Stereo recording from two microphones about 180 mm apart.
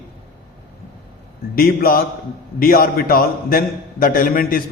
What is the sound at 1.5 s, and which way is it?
A man's voice, 55° left (ahead or behind).